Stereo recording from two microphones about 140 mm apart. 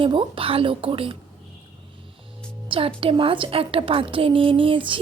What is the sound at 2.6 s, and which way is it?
Speech, 40° right (ahead or behind).